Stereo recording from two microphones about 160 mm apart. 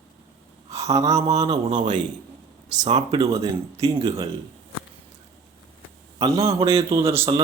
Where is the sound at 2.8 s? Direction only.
40° right (ahead or behind).